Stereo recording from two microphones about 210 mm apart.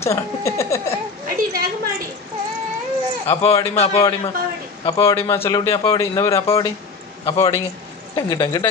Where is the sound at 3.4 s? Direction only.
30° left (ahead or behind).